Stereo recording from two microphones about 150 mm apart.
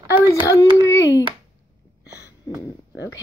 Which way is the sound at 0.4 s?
25° left (ahead or behind).